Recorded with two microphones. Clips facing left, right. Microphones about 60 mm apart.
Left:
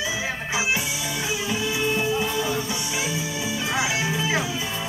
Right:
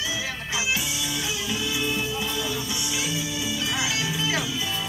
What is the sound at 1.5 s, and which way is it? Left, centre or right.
Music, left.